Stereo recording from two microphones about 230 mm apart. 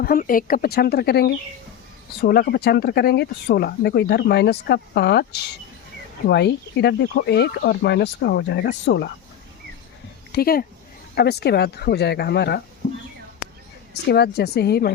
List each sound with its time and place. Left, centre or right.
0.0 s speech: left
10.3 s speech: left
14.1 s speech: left